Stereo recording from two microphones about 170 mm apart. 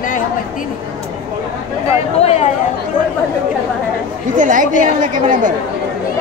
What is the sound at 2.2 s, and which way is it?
Speech, 40° left (ahead or behind).